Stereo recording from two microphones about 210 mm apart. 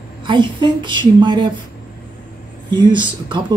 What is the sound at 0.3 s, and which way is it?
Speech, 20° right (ahead or behind).